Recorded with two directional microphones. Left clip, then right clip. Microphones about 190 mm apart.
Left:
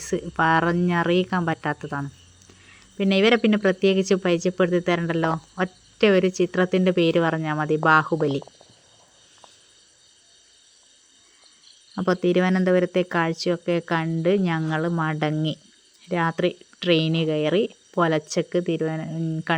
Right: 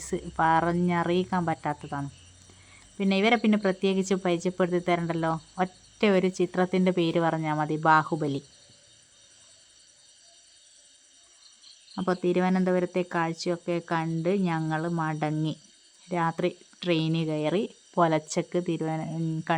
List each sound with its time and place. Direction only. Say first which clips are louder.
0.0 s speech: left 4 dB; 10° left (ahead or behind)
11.9 s speech: left 5 dB; 15° left (ahead or behind)